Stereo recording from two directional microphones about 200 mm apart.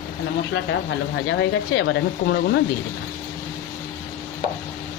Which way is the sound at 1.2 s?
65° left (ahead or behind).